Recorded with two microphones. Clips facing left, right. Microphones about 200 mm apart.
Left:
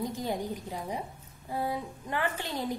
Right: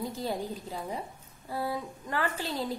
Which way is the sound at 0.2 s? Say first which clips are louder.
Even; 20° left (ahead or behind).